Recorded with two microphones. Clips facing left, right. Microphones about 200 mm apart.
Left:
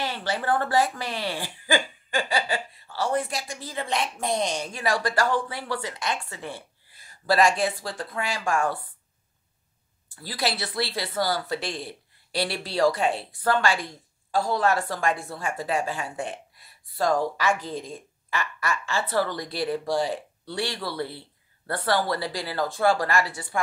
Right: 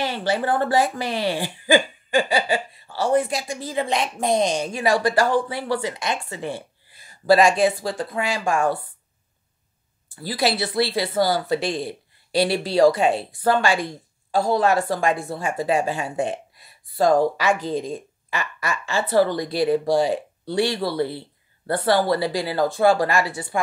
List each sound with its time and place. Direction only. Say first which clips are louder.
0.0 s speech: right 6 dB; 15° right (ahead or behind)
10.2 s speech: right 6 dB; 10° right (ahead or behind)